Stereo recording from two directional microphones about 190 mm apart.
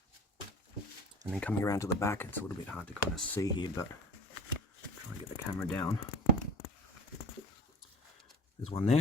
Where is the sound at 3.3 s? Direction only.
20° left (ahead or behind).